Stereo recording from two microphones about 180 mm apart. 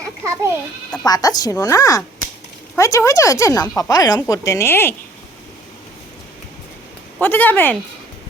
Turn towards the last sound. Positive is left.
turn(degrees=10)  # may be behind; listen again after turning